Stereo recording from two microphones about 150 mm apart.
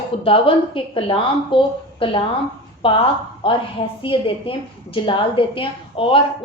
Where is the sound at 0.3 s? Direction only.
35° left (ahead or behind).